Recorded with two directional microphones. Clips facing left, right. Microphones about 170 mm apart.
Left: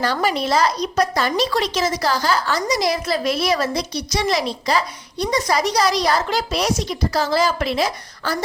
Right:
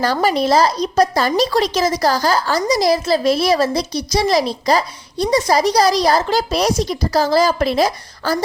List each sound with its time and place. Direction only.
0.0 s speech: 40° right (ahead or behind)